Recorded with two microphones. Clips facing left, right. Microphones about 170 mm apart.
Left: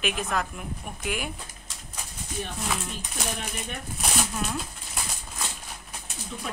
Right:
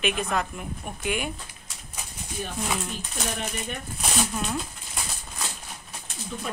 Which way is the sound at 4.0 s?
Centre (ahead or behind).